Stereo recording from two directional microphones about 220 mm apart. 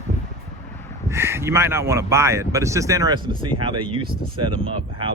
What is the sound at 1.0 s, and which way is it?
Speech, 10° right (ahead or behind).